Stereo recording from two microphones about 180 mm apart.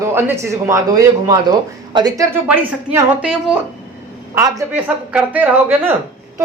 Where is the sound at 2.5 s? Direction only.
10° right (ahead or behind).